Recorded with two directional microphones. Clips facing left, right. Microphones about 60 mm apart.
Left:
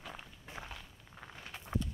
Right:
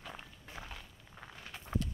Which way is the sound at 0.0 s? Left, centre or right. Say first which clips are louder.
Even; centre.